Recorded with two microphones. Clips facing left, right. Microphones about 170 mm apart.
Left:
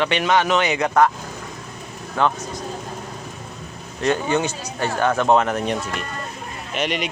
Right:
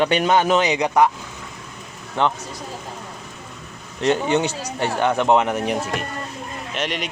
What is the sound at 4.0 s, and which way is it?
Speech, 25° right (ahead or behind).